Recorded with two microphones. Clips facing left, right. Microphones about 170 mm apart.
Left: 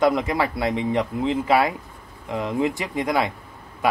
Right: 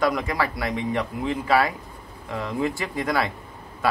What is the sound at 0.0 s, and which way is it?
Speech, 20° left (ahead or behind).